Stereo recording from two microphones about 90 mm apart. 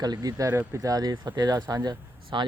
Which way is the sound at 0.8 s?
45° right (ahead or behind).